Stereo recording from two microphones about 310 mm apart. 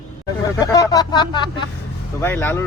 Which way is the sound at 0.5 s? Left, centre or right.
Centre.